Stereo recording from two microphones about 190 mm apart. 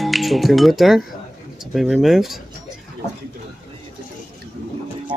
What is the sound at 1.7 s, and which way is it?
Speech, centre (ahead or behind).